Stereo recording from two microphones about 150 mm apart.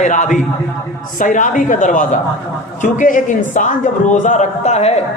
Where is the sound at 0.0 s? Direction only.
55° left (ahead or behind).